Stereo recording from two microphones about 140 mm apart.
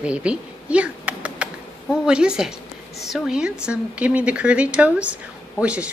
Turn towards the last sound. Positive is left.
turn(degrees=-10)  # may be behind; listen again after turning